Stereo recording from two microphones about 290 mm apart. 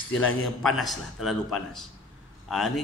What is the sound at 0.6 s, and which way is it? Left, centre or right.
A man's voice, centre.